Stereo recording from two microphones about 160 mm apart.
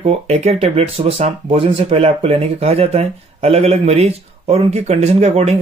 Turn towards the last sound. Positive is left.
turn(degrees=-45)  # may be behind; listen again after turning